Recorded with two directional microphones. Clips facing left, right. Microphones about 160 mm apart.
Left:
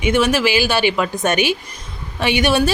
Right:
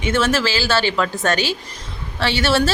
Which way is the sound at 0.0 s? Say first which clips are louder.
Left 3 dB; 15° left (ahead or behind).